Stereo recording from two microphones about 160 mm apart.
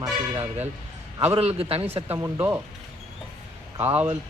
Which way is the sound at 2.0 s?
15° right (ahead or behind).